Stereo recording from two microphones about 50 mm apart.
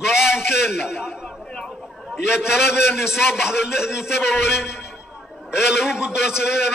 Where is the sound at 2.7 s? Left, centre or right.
Centre.